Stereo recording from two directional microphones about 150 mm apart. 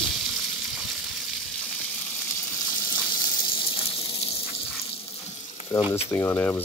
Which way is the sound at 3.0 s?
15° left (ahead or behind).